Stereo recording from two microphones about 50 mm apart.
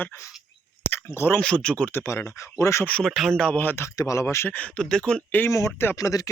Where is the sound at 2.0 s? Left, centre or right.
Left.